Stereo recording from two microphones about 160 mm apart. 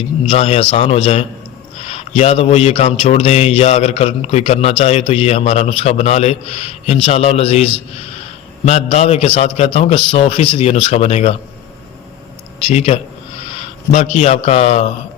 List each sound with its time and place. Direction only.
0.3 s speech: 40° left (ahead or behind)
12.6 s a man's voice: 40° left (ahead or behind)